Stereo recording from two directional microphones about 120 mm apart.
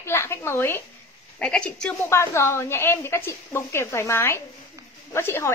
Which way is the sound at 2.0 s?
20° left (ahead or behind).